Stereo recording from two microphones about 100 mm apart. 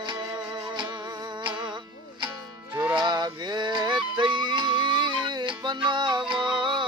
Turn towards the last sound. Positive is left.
turn(degrees=-50)  # may be behind; listen again after turning